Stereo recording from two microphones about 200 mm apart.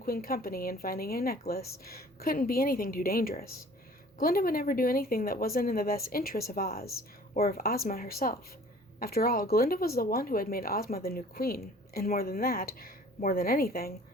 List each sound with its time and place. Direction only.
0.0 s speech: 50° left (ahead or behind)